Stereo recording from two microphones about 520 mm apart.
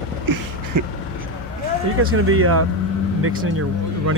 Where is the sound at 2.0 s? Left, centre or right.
Right.